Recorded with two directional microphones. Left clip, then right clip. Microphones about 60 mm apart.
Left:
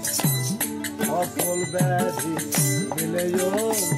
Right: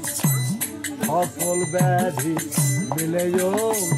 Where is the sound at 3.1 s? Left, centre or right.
Left.